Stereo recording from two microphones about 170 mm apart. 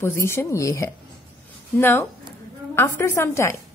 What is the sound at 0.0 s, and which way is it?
A woman's voice, 15° left (ahead or behind).